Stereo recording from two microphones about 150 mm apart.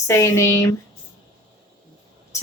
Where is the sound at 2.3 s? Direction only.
20° left (ahead or behind).